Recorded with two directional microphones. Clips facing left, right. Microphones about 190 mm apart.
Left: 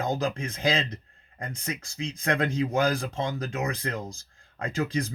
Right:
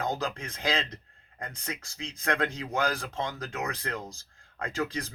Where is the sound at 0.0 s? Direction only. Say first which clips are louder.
Left 4 dB; 10° left (ahead or behind).